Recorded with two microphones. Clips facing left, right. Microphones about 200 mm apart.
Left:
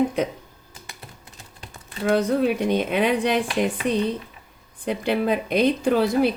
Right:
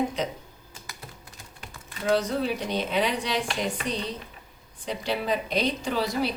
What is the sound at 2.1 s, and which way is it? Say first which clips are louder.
A woman's voice: left 7 dB; 55° left (ahead or behind).